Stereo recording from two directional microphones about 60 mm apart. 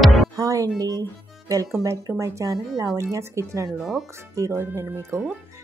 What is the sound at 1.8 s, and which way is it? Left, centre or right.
Speech, right.